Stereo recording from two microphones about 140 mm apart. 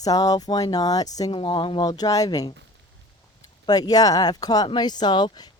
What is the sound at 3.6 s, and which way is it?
A woman's voice, 30° left (ahead or behind).